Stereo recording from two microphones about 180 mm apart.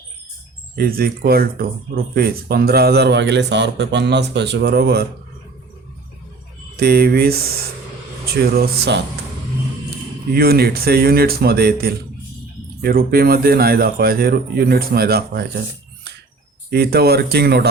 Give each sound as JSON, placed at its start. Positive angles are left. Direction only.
{"t": 0.8, "sound": "speech", "side_deg": -55}
{"t": 6.7, "sound": "speech", "side_deg": -60}
{"t": 10.3, "sound": "speech", "side_deg": -60}
{"t": 16.6, "sound": "speech", "side_deg": -60}